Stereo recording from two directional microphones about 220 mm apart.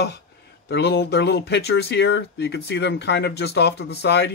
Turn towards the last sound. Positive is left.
turn(degrees=50)  # may be behind; listen again after turning